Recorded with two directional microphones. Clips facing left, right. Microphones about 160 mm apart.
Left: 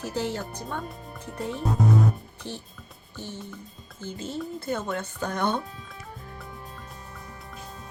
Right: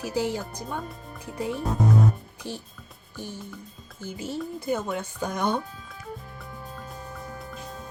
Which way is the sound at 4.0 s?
10° right (ahead or behind).